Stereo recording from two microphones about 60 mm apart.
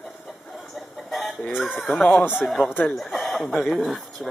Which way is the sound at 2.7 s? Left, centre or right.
Left.